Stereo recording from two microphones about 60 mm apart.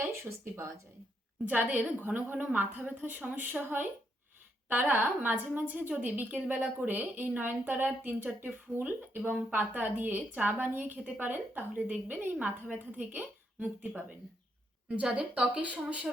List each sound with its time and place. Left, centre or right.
0.0 s speech: right
1.5 s a woman's voice: right